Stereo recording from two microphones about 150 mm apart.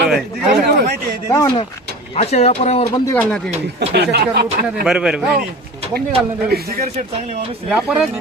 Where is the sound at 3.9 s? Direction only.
90° right.